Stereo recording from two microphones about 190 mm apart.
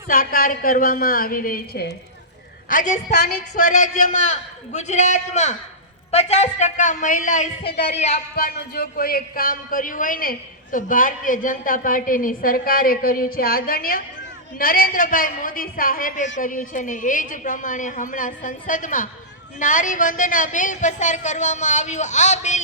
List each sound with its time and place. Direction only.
0.1 s speech: 50° left (ahead or behind)
2.6 s speech: 40° left (ahead or behind)
7.9 s speech: 35° left (ahead or behind)
8.4 s speech: 55° left (ahead or behind); by 22.6 s 40° left (ahead or behind)